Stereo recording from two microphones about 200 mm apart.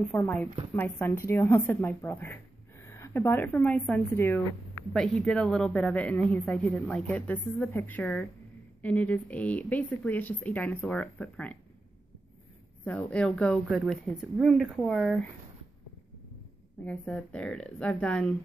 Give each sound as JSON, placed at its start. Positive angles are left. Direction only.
{"t": 0.1, "sound": "a woman's voice", "side_deg": 5}
{"t": 12.8, "sound": "speech", "side_deg": 5}
{"t": 16.8, "sound": "speech", "side_deg": 5}